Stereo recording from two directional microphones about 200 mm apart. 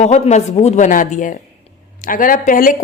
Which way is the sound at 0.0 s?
35° left (ahead or behind).